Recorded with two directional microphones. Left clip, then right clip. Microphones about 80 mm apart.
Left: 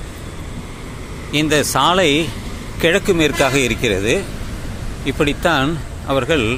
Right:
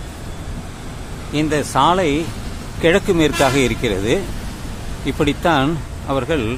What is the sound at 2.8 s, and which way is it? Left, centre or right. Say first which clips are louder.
Speech: even; centre.